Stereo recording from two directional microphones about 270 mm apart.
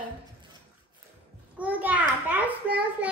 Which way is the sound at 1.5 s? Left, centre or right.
Centre.